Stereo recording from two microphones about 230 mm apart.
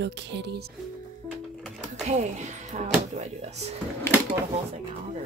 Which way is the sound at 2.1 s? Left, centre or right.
Right.